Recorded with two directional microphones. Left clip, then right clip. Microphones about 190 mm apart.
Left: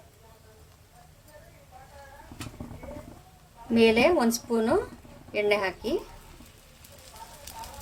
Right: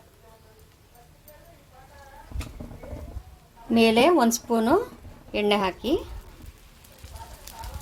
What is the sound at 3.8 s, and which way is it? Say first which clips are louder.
A woman's voice: right 2 dB; 35° right (ahead or behind).